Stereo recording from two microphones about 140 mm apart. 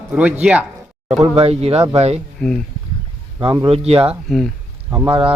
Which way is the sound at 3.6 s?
45° right (ahead or behind).